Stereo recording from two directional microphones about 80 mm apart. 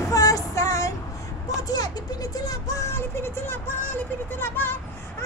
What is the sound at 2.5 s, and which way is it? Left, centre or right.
Music, left.